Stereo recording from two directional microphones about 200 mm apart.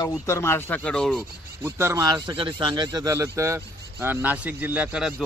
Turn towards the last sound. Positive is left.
turn(degrees=-5)  # may be behind; listen again after turning